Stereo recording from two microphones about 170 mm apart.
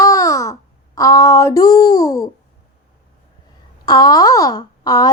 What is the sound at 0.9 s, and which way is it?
A child's voice, 20° left (ahead or behind).